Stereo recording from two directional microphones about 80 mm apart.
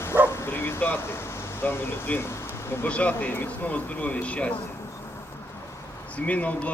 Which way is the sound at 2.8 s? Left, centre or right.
Centre.